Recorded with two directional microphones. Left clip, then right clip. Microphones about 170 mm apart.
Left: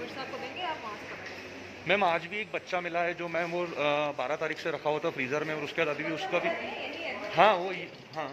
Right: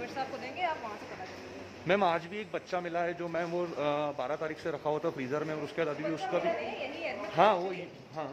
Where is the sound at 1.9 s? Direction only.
30° right (ahead or behind).